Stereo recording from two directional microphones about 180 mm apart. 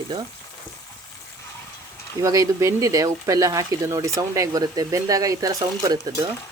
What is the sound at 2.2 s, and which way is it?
Speech, 15° right (ahead or behind).